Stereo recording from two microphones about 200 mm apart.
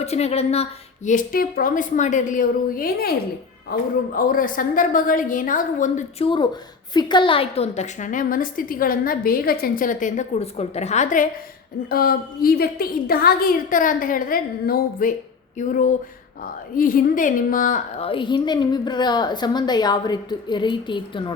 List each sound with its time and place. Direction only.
0.0 s a woman's voice: 30° left (ahead or behind)